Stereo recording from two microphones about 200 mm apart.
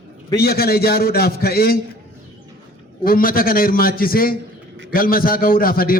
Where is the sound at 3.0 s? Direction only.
45° left (ahead or behind).